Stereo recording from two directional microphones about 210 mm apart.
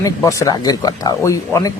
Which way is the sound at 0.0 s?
15° left (ahead or behind).